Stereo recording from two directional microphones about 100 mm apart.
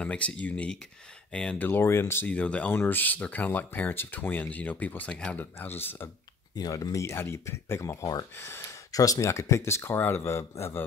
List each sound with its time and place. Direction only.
0.0 s speech: 10° left (ahead or behind)
1.7 s speech: 25° left (ahead or behind)
2.3 s speech: 15° left (ahead or behind)
6.5 s speech: 40° left (ahead or behind)
8.4 s speech: 25° left (ahead or behind)
8.9 s speech: 35° left (ahead or behind)